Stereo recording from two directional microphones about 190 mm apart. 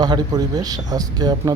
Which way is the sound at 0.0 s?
20° right (ahead or behind).